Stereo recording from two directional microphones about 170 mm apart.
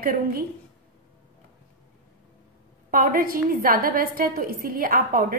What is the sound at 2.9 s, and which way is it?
A woman's voice, 55° right (ahead or behind).